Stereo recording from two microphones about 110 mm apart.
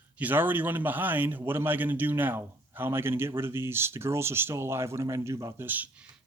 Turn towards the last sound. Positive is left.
turn(degrees=-15)  # may be behind; listen again after turning